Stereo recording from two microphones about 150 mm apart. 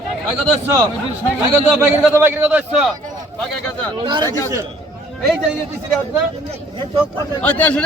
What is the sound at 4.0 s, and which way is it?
Speech, 30° right (ahead or behind).